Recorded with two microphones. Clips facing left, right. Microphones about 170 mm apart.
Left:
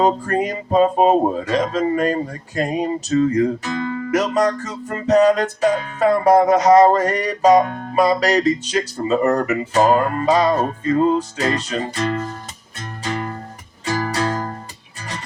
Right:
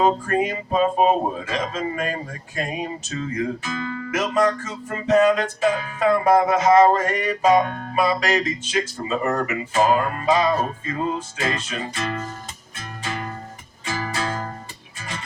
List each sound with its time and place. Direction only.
0.0 s music: 35° left (ahead or behind)